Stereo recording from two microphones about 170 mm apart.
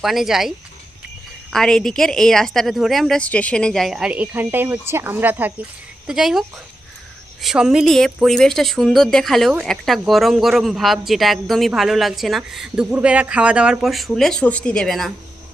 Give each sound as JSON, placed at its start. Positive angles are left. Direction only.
{"t": 0.0, "sound": "speech", "side_deg": 0}
{"t": 1.5, "sound": "speech", "side_deg": 5}
{"t": 7.4, "sound": "speech", "side_deg": -5}